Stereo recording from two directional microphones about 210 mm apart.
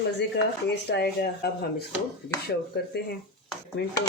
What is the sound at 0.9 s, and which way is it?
Speech, 50° left (ahead or behind).